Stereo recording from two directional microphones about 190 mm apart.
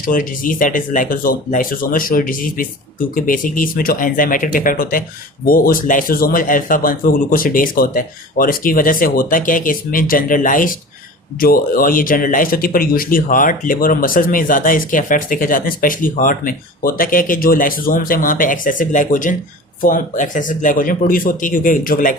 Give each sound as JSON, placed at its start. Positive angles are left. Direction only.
{"t": 0.0, "sound": "speech", "side_deg": 45}